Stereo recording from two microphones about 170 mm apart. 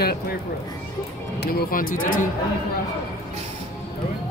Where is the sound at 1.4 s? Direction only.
60° left (ahead or behind).